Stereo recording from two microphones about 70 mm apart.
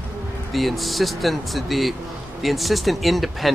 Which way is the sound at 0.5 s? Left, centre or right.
Centre.